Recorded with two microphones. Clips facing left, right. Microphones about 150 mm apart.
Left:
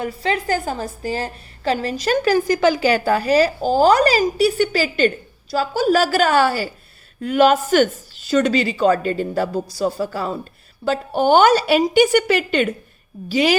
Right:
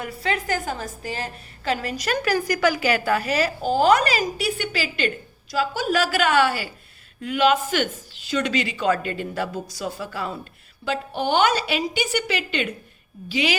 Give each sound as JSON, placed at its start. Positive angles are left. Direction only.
{"t": 0.0, "sound": "a woman's voice", "side_deg": 30}